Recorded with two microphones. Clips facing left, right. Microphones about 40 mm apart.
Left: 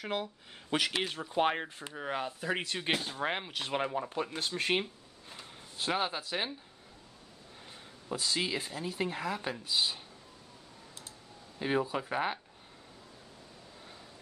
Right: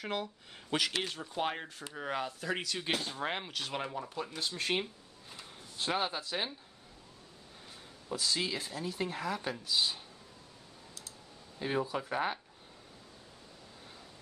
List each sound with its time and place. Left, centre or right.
0.0 s speech: centre
2.0 s speech: centre
2.6 s speech: left
3.0 s speech: centre
3.5 s speech: left
5.4 s speech: centre
8.1 s speech: centre
11.6 s speech: centre